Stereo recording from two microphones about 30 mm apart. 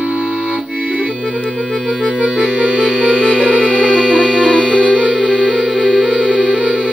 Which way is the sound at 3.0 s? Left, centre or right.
Right.